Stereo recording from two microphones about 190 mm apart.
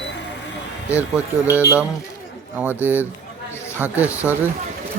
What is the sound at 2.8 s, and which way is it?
Speech, 10° right (ahead or behind).